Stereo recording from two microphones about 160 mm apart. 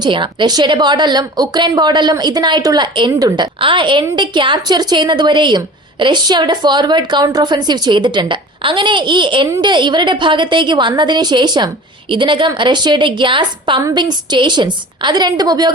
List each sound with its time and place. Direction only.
0.0 s a woman's voice: 30° right (ahead or behind)